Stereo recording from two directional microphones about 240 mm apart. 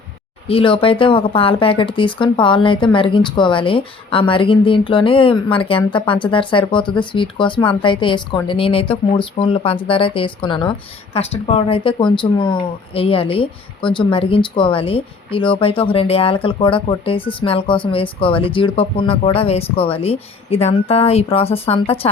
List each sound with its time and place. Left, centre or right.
0.4 s speech: left